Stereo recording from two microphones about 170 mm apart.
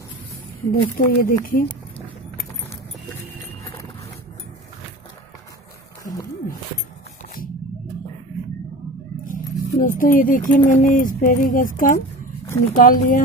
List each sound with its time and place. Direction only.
0.7 s speech: 55° left (ahead or behind)
9.2 s a sound: 50° left (ahead or behind)
10.7 s speech: 50° left (ahead or behind)